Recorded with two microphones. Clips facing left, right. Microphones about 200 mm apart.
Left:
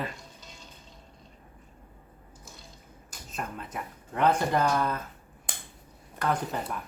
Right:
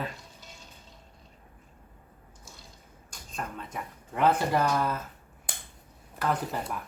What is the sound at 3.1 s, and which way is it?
Speech, 5° left (ahead or behind).